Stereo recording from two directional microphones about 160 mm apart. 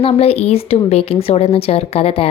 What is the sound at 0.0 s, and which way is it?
Speech, 40° left (ahead or behind).